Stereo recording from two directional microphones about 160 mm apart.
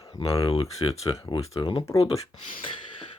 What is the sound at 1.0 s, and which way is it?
Speech, 20° left (ahead or behind).